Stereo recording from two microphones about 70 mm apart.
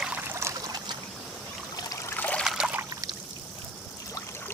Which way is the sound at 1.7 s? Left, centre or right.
Left.